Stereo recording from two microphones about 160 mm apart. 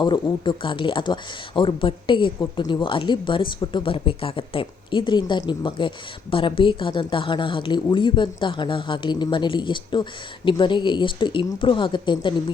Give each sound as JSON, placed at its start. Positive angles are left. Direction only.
{"t": 0.0, "sound": "speech", "side_deg": 30}